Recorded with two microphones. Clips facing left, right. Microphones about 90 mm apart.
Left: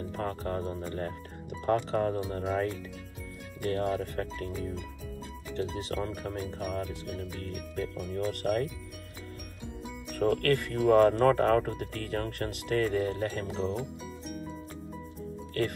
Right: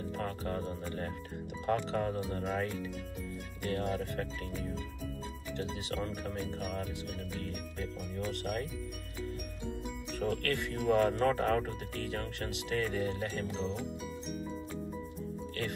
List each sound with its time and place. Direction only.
0.2 s speech: 35° left (ahead or behind)
5.6 s speech: 40° left (ahead or behind)
8.3 s speech: 50° left (ahead or behind)
10.1 s speech: 45° left (ahead or behind)